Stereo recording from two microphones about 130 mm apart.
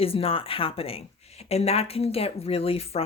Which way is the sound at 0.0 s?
45° left (ahead or behind).